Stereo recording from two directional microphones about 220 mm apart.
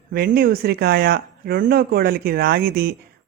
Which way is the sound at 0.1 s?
45° right (ahead or behind).